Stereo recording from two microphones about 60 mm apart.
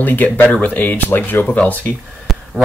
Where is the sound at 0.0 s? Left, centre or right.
Left.